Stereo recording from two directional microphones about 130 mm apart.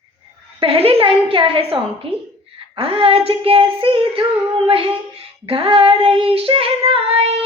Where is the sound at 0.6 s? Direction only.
45° right (ahead or behind).